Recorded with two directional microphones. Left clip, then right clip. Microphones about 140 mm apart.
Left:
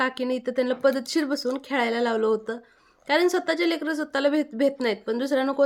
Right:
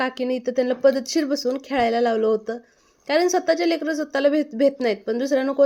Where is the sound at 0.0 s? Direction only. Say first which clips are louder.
Right 2 dB; 5° right (ahead or behind).